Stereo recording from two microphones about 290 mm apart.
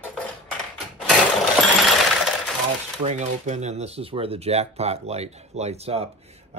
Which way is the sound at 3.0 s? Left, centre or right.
Right.